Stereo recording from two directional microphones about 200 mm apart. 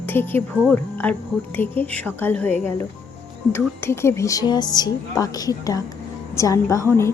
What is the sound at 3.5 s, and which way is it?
A woman's voice, 10° left (ahead or behind).